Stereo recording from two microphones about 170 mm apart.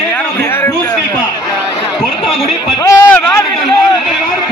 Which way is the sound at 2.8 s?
15° left (ahead or behind).